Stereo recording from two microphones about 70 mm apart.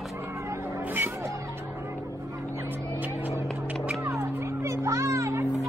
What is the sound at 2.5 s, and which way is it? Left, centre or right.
Vehicle, right.